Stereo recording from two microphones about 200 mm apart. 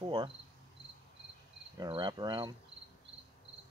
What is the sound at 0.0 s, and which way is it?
Cricket, 25° right (ahead or behind).